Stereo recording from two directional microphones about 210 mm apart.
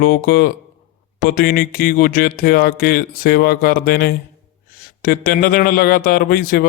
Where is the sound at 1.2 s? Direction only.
45° left (ahead or behind).